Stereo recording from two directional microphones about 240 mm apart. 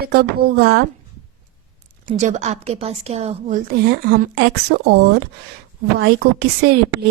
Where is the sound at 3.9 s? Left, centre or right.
Right.